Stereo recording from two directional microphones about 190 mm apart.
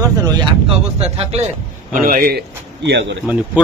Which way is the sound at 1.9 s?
50° right (ahead or behind).